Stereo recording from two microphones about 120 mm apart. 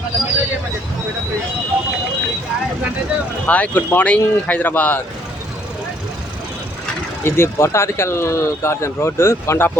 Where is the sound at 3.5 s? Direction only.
15° left (ahead or behind).